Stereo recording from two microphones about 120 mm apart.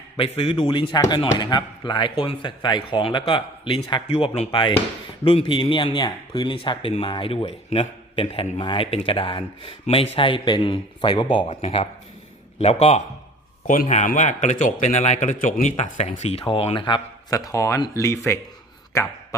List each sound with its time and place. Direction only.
0.2 s a man's voice: 50° left (ahead or behind)
12.5 s a man's voice: 60° left (ahead or behind)
13.7 s speech: 80° left
15.8 s speech: 80° left; by 17.3 s 40° left (ahead or behind)
17.3 s speech: 25° left (ahead or behind)